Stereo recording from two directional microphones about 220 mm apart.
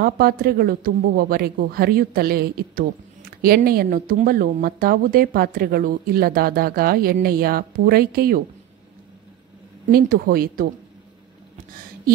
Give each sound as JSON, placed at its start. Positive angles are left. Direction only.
{"t": 0.0, "sound": "speech", "side_deg": -40}
{"t": 9.8, "sound": "speech", "side_deg": -40}